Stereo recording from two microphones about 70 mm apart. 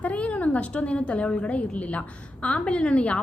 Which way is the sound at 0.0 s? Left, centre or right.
Centre.